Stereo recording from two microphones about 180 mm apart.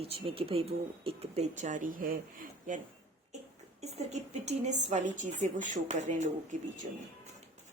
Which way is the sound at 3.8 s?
40° right (ahead or behind).